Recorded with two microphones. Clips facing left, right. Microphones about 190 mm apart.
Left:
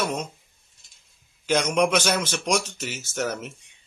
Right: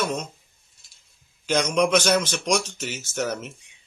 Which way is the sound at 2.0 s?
5° left (ahead or behind).